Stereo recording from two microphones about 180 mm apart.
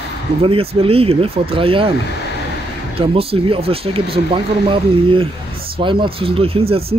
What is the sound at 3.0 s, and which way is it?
Speech, 30° right (ahead or behind).